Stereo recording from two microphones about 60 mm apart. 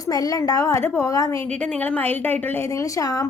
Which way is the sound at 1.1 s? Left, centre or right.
Left.